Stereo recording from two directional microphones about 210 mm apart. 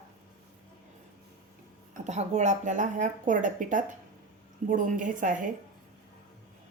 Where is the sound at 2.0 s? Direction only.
35° right (ahead or behind).